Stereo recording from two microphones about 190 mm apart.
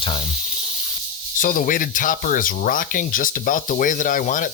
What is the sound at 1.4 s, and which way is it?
Speech, 45° left (ahead or behind).